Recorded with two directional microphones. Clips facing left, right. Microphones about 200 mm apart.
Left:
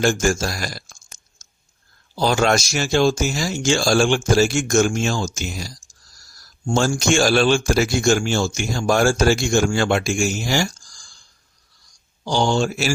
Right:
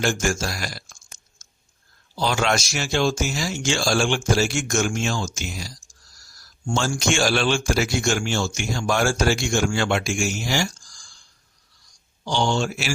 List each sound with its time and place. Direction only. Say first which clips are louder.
0.0 s a man's voice: left 4 dB; 40° left (ahead or behind)
6.7 s speech: left 5 dB; 40° left (ahead or behind)
12.2 s speech: left 3 dB; 40° left (ahead or behind)